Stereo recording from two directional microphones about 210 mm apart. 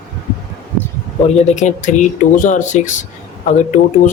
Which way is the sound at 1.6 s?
35° left (ahead or behind).